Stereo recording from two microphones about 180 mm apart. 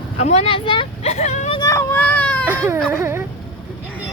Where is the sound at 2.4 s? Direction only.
10° right (ahead or behind).